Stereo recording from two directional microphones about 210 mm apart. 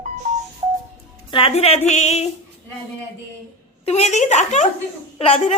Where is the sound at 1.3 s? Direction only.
25° left (ahead or behind).